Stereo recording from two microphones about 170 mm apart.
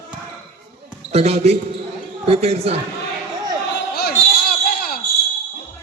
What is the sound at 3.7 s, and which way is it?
Basketball bounce, 65° left (ahead or behind).